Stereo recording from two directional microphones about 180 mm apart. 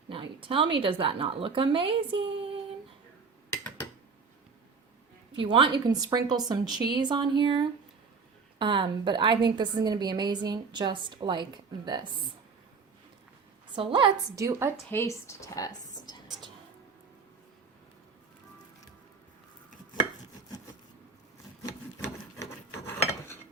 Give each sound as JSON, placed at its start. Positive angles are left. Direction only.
{"t": 0.1, "sound": "a woman's voice", "side_deg": -30}
{"t": 5.4, "sound": "a woman's voice", "side_deg": -25}
{"t": 13.7, "sound": "a woman's voice", "side_deg": -30}
{"t": 14.8, "sound": "speech", "side_deg": 15}